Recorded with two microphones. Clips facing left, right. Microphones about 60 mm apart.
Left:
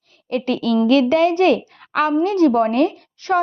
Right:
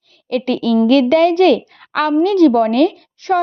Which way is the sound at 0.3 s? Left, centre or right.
Centre.